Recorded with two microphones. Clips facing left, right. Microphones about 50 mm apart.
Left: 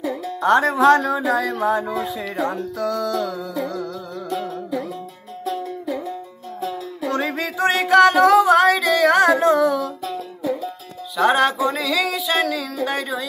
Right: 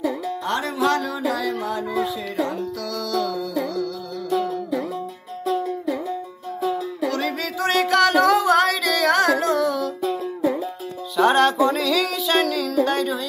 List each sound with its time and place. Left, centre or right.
0.0 s music: centre
0.4 s speech: left
2.8 s music: left
7.1 s music: left
10.4 s music: centre
11.2 s speech: centre